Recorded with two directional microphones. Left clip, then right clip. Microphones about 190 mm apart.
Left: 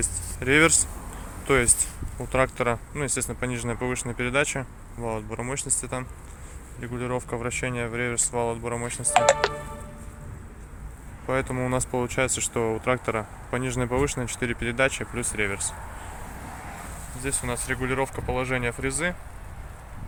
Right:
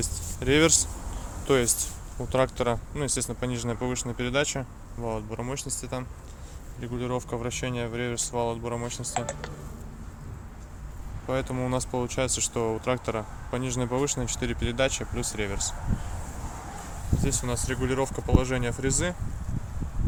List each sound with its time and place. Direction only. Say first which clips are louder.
0.0 s speech: left 2 dB; 15° right (ahead or behind)
9.1 s speech: left 15 dB; 45° left (ahead or behind)
11.3 s speech: left 3 dB; centre (ahead or behind)
17.2 s speech: left 2 dB; 15° right (ahead or behind)